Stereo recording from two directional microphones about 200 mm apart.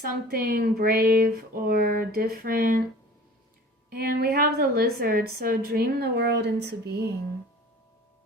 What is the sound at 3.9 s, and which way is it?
A woman's voice, 50° right (ahead or behind).